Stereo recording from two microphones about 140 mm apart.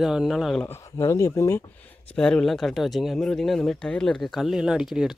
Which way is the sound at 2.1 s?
5° left (ahead or behind).